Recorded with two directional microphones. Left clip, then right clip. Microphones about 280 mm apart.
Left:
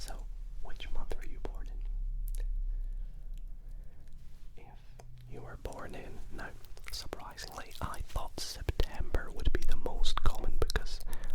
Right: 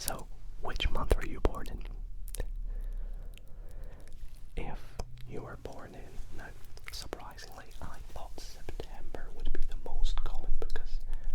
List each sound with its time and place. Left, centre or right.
0.0 s whispering: right
4.5 s whispering: right
5.3 s whispering: right
5.6 s whispering: centre
5.9 s whispering: left
6.7 s whispering: centre
7.5 s whispering: left